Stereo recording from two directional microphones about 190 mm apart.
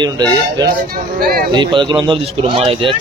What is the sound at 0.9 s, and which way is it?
Speech, 50° right (ahead or behind).